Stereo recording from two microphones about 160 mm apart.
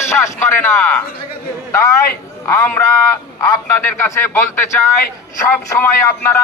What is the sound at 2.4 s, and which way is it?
A man's voice, 15° left (ahead or behind).